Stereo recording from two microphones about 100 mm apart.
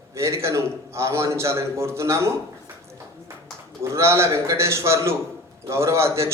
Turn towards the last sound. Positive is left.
turn(degrees=-25)  # may be behind; listen again after turning